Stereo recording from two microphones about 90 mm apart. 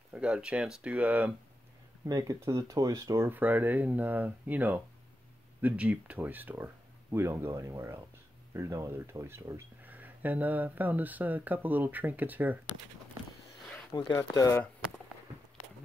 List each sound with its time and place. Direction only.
0.1 s speech: 10° right (ahead or behind)
2.0 s speech: 40° right (ahead or behind)
3.3 s speech: 20° right (ahead or behind)
9.8 s speech: 20° right (ahead or behind)
14.1 s speech: 40° left (ahead or behind)